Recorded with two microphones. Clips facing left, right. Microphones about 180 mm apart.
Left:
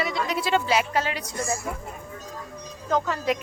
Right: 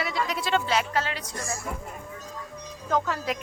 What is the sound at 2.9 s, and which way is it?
Speech, centre (ahead or behind).